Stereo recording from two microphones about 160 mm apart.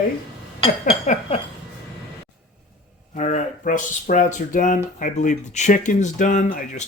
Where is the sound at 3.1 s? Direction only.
50° left (ahead or behind).